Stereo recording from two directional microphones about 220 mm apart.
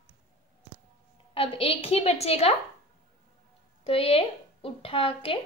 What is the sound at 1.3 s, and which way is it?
A woman's voice, 25° left (ahead or behind).